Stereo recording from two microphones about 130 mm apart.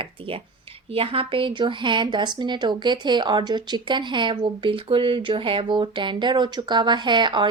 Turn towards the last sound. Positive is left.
turn(degrees=-35)  # may be behind; listen again after turning